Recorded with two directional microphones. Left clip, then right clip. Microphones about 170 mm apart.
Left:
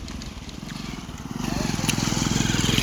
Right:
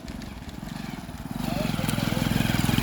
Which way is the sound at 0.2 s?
Centre (ahead or behind).